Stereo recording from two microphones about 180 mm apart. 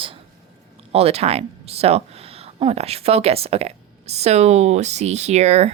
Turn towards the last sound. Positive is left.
turn(degrees=-35)  # may be behind; listen again after turning